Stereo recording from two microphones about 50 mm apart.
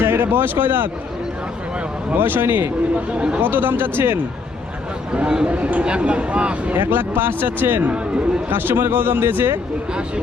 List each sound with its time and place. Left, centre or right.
0.0 s speech: right
2.1 s speech: right
3.1 s speech: right
3.4 s speech: right
5.1 s speech: centre
6.7 s speech: right